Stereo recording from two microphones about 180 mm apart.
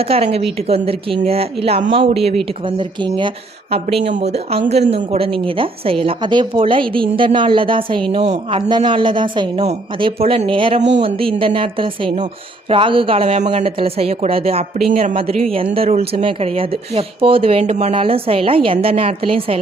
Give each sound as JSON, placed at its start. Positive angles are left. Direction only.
{"t": 0.1, "sound": "speech", "side_deg": -35}
{"t": 8.3, "sound": "speech", "side_deg": -40}
{"t": 8.7, "sound": "speech", "side_deg": -25}